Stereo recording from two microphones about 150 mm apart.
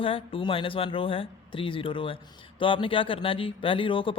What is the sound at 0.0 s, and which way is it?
Speech, 35° left (ahead or behind).